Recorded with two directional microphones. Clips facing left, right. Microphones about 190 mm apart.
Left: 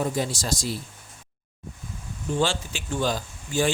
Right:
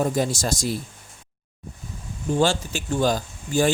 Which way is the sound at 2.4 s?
45° right (ahead or behind).